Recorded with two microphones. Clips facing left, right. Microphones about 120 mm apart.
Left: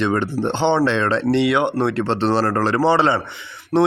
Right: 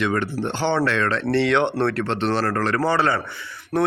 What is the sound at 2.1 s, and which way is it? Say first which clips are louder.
A man's voice: left 4 dB; 35° left (ahead or behind).